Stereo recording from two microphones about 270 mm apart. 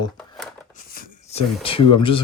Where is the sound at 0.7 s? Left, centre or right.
Left.